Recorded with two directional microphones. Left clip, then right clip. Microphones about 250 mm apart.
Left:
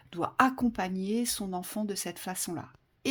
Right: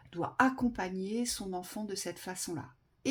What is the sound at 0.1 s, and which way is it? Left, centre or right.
Speech, left.